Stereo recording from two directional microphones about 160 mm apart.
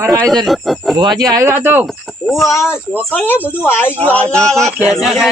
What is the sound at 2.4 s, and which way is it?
A man's voice, 20° left (ahead or behind).